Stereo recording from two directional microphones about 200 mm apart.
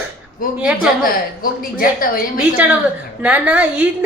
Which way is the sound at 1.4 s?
45° left (ahead or behind).